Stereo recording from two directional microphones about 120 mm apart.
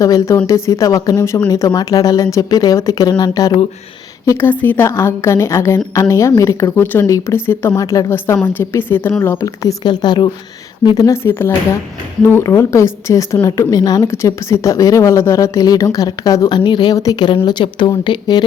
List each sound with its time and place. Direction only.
0.0 s a woman's voice: 25° left (ahead or behind)
4.3 s a woman's voice: 20° left (ahead or behind)
6.8 s a woman's voice: 15° left (ahead or behind)
9.8 s a woman's voice: 35° left (ahead or behind)
11.2 s a woman's voice: 20° left (ahead or behind); by 18.4 s 40° left (ahead or behind)